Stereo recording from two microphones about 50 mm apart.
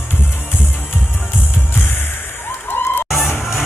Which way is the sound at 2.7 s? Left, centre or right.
Left.